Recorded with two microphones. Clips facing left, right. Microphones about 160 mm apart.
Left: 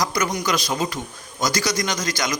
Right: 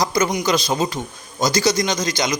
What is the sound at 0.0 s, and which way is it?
A man's voice, 25° right (ahead or behind).